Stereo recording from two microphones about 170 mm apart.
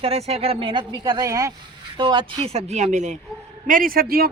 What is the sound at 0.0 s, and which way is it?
Speech, 35° right (ahead or behind).